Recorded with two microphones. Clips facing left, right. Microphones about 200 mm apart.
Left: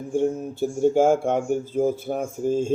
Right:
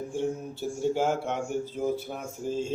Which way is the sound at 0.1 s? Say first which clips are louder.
Left 11 dB; 50° left (ahead or behind).